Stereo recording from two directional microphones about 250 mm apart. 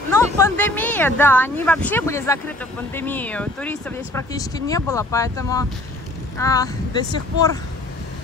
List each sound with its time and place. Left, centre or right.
0.1 s speech: centre